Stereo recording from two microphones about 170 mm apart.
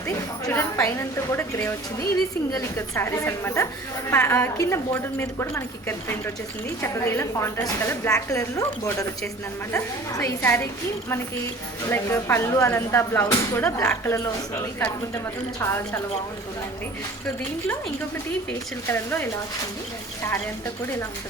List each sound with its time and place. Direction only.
0.4 s a woman's voice: 15° left (ahead or behind)
6.8 s a woman's voice: 15° left (ahead or behind)
11.9 s a woman's voice: 15° left (ahead or behind)
15.6 s a woman's voice: 15° left (ahead or behind)
18.9 s a woman's voice: 10° left (ahead or behind)